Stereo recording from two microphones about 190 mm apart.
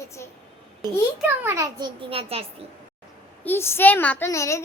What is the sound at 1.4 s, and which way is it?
A child's voice, 15° right (ahead or behind).